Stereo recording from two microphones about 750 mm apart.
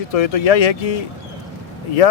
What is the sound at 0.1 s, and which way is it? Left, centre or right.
Speech, left.